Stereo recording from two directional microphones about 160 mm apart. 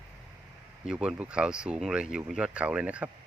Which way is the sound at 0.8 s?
5° right (ahead or behind).